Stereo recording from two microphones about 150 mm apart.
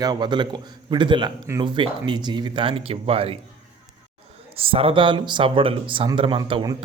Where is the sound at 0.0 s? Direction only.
30° right (ahead or behind).